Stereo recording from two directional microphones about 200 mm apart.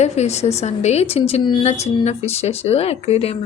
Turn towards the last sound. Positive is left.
turn(degrees=30)  # may be behind; listen again after turning